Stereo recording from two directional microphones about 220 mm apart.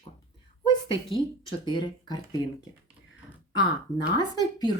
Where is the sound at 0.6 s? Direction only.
20° left (ahead or behind).